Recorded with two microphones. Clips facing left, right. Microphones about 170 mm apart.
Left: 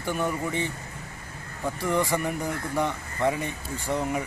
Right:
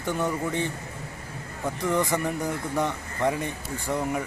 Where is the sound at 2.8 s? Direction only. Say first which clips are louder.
Left 1 dB; 15° right (ahead or behind).